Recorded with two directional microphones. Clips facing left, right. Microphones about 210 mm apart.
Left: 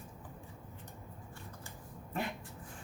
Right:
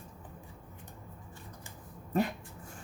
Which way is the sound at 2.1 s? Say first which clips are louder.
Right 8 dB; 40° right (ahead or behind).